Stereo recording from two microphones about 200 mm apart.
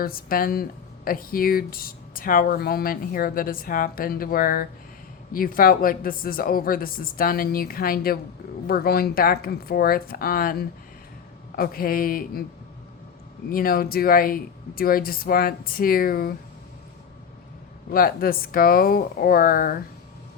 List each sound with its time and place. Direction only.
0.0 s speech: 45° left (ahead or behind)
13.5 s speech: 45° left (ahead or behind)
17.9 s speech: 45° left (ahead or behind)